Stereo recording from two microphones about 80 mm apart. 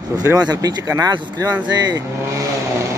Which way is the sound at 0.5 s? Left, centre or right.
Right.